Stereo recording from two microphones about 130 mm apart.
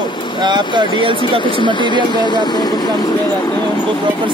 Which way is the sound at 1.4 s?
40° left (ahead or behind).